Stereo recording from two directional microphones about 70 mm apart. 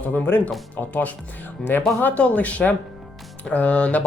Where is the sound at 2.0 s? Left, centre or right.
Left.